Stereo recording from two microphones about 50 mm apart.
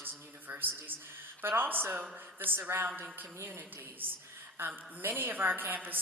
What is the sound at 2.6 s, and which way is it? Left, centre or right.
Speech, right.